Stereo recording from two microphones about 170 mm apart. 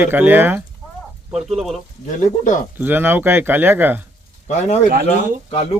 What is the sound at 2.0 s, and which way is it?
Speech, 45° left (ahead or behind).